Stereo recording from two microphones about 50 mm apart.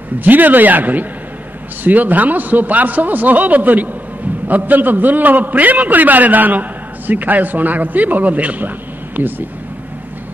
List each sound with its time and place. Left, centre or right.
0.2 s a man's voice: right